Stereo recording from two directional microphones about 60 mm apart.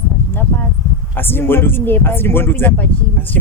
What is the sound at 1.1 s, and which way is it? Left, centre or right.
Speech, left.